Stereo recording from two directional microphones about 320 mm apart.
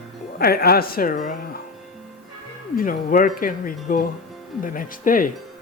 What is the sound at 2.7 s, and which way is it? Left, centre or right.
Speech, left.